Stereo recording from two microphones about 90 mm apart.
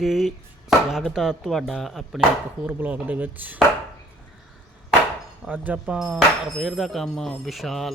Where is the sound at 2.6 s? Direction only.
20° right (ahead or behind).